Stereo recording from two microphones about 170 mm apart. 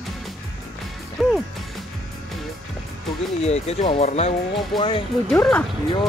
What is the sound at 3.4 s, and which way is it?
Speech, 40° left (ahead or behind).